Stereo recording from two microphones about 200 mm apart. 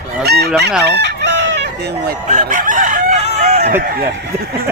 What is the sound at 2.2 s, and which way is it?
Chicken, 40° right (ahead or behind).